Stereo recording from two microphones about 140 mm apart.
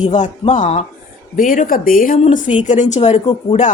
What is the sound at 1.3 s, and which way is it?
Speech, 75° left (ahead or behind).